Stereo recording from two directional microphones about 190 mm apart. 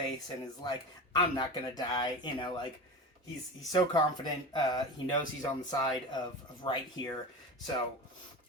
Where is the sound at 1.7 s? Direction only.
20° left (ahead or behind).